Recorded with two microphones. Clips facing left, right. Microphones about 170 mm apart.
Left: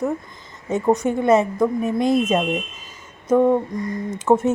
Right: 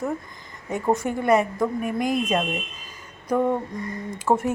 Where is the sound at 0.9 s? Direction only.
20° left (ahead or behind).